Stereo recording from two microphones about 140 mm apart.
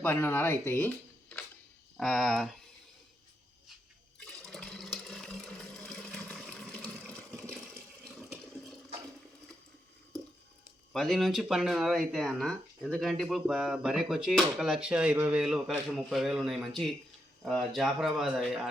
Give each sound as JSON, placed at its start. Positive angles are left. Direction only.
{"t": 0.0, "sound": "speech", "side_deg": 15}
{"t": 2.0, "sound": "speech", "side_deg": 0}
{"t": 4.2, "sound": "toilet flush", "side_deg": 0}
{"t": 6.3, "sound": "water", "side_deg": 0}
{"t": 10.9, "sound": "speech", "side_deg": 0}